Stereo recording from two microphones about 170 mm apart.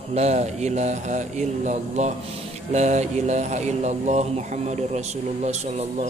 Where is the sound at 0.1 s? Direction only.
40° right (ahead or behind).